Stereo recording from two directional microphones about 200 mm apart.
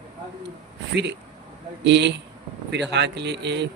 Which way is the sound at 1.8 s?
60° right (ahead or behind).